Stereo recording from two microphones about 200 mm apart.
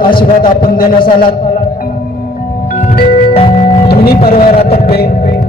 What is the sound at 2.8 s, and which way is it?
Music, 45° left (ahead or behind).